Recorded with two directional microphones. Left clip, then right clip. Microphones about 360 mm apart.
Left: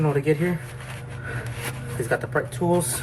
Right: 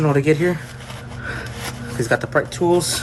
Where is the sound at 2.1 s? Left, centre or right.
Right.